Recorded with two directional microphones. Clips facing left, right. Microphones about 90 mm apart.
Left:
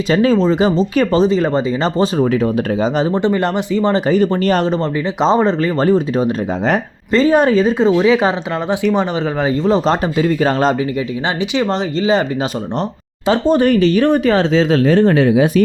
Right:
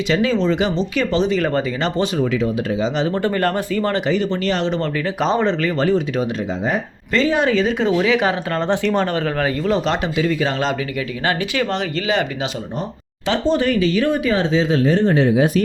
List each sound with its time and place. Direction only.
0.1 s speech: 40° left (ahead or behind)
3.1 s speech: 20° left (ahead or behind)
4.0 s speech: 40° left (ahead or behind)
4.8 s speech: 30° left (ahead or behind)
8.6 s speech: 10° left (ahead or behind)
9.6 s speech: 35° left (ahead or behind)
11.3 s speech: 20° left (ahead or behind)
11.7 s speech: 30° left (ahead or behind)
13.4 s speech: 50° left (ahead or behind); by 15.4 s 90° left